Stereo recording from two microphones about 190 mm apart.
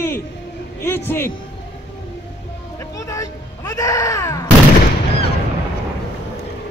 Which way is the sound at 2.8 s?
15° left (ahead or behind).